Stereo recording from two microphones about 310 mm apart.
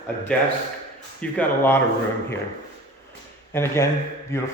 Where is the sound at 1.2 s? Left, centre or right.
Centre.